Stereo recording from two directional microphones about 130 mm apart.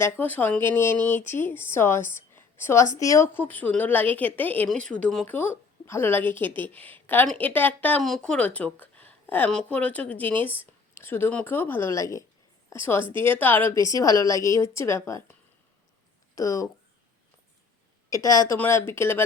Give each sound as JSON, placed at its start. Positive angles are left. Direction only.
{"t": 0.0, "sound": "a woman's voice", "side_deg": 15}
{"t": 13.8, "sound": "speech", "side_deg": 25}
{"t": 18.1, "sound": "speech", "side_deg": 25}